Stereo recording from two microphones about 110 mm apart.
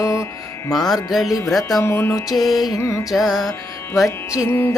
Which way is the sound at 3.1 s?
Centre (ahead or behind).